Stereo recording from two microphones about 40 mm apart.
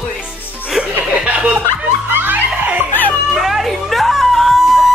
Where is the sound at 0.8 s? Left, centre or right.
Centre.